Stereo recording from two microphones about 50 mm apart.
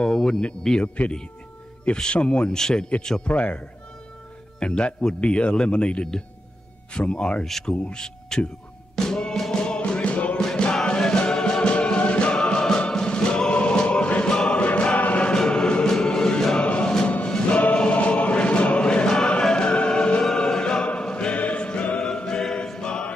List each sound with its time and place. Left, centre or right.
0.0 s a sound: centre
0.7 s speech: centre
2.0 s a man's voice: centre
3.3 s a man's voice: left
7.4 s speech: centre
8.9 s music: centre
10.4 s music: centre
15.0 s chant: left
15.3 s music: centre
16.6 s music: left
17.7 s choir: left
20.3 s music: centre
22.0 s choir: centre